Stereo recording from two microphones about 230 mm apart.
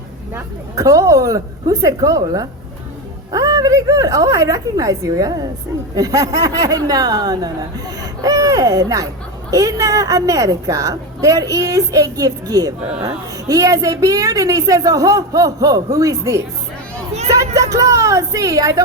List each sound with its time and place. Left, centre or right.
0.3 s a woman's voice: centre